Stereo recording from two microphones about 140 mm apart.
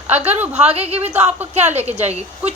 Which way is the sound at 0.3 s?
10° right (ahead or behind).